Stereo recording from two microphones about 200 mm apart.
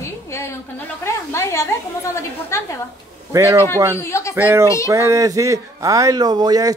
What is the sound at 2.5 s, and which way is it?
Speech, 15° left (ahead or behind).